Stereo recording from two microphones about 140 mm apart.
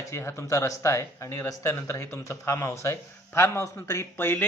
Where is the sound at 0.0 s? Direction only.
20° left (ahead or behind).